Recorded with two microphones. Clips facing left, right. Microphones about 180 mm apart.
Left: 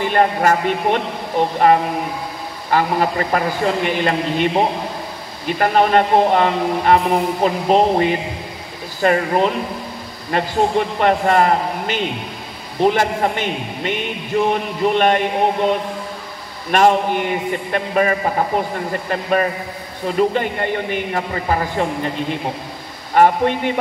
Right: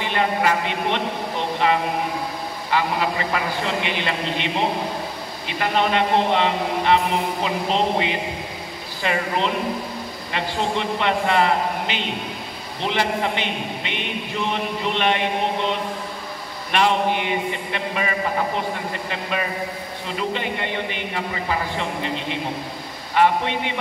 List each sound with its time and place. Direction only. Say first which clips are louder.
0.0 s speech: left 5 dB; 45° left (ahead or behind)
5.5 s speech: left 6 dB; 45° left (ahead or behind)
16.7 s speech: left 5 dB; 45° left (ahead or behind)
20.2 s speech: left 8 dB; 45° left (ahead or behind)